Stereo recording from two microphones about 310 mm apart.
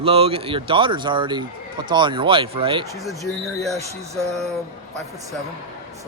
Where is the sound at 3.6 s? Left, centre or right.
Centre.